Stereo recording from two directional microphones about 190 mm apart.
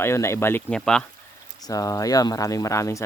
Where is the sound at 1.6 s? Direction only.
20° left (ahead or behind).